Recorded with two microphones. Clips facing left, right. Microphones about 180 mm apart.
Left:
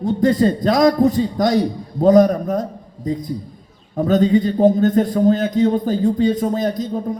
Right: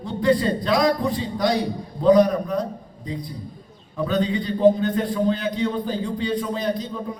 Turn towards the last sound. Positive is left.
turn(degrees=45)  # may be behind; listen again after turning